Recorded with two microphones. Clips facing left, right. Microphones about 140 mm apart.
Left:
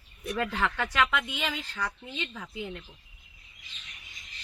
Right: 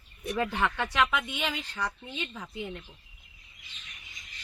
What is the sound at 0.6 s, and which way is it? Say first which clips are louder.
Speech: left 1 dB; 10° right (ahead or behind).